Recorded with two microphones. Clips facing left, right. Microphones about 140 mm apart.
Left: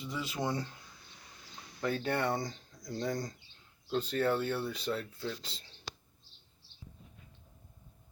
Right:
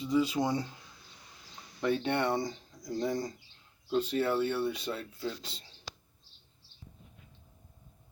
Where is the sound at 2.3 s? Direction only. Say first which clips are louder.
Right 3 dB; 5° right (ahead or behind).